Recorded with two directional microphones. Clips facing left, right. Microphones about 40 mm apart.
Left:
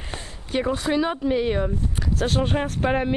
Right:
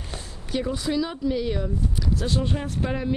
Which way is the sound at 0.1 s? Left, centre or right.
Left.